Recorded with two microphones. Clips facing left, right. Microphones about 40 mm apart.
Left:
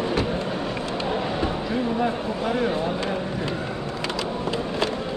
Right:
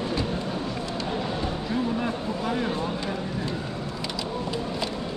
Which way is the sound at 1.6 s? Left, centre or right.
Centre.